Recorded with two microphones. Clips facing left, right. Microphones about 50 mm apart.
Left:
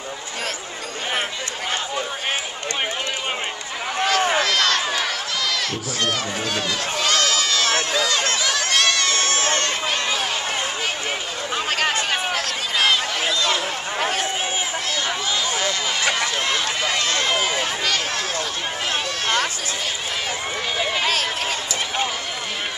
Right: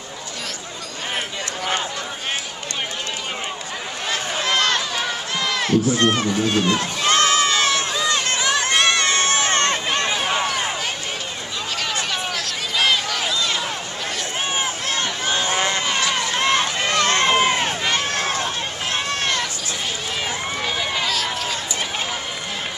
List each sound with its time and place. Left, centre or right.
4.0 s run: left
4.5 s run: right
5.4 s crowd: right
6.4 s music: right
7.9 s run: right
8.3 s crowd: right
11.5 s a sound: left
12.7 s a sound: centre
13.9 s run: left
15.2 s a sound: right
15.5 s run: right
17.0 s run: right
20.7 s run: centre
21.0 s run: left